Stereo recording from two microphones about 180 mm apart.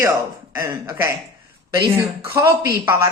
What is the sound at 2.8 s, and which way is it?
Speech, 15° right (ahead or behind).